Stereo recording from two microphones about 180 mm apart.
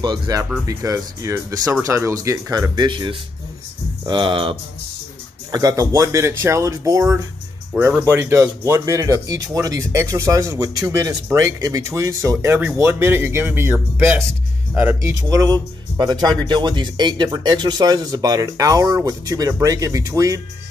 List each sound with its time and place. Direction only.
0.0 s speech: 20° right (ahead or behind)
7.7 s speech: 5° right (ahead or behind)